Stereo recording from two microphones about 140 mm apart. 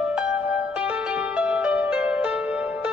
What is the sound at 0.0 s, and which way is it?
Music, 5° right (ahead or behind).